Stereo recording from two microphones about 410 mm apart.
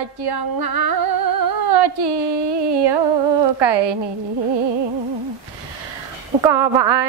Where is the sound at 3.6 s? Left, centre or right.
Right.